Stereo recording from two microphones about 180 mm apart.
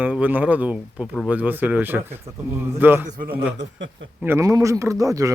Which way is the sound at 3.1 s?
55° right (ahead or behind).